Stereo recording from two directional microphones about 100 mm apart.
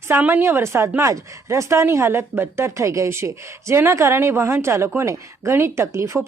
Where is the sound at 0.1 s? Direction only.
20° right (ahead or behind).